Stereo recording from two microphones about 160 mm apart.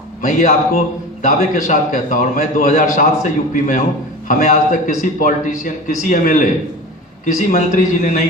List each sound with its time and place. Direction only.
0.2 s a man's voice: 50° left (ahead or behind)